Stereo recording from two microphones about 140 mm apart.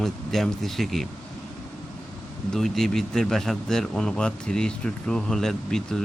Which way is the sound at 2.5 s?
Centre (ahead or behind).